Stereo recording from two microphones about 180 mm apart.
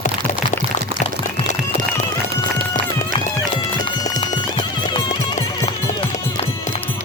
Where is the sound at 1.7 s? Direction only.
40° left (ahead or behind).